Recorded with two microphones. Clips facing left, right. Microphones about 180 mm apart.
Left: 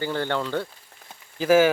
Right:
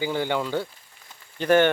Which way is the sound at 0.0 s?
10° right (ahead or behind).